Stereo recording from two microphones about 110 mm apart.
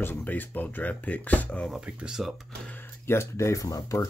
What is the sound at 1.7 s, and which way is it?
Speech, 5° right (ahead or behind).